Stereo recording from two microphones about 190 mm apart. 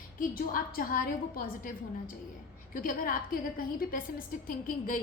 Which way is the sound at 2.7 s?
45° left (ahead or behind).